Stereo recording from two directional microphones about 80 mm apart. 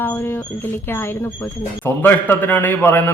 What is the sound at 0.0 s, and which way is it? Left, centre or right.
A man's voice, left.